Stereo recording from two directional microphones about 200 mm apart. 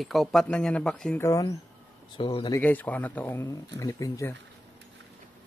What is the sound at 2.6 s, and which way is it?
Speech, 10° left (ahead or behind).